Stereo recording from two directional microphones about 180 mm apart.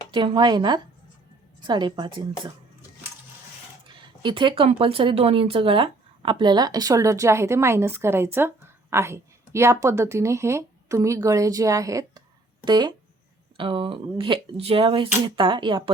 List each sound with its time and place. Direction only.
0.1 s speech: 25° right (ahead or behind)
3.8 s speech: 25° right (ahead or behind)